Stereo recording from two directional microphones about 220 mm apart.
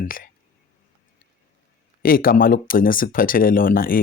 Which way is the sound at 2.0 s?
40° left (ahead or behind).